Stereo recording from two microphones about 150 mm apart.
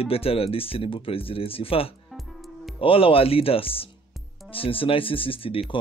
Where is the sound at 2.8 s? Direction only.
35° left (ahead or behind).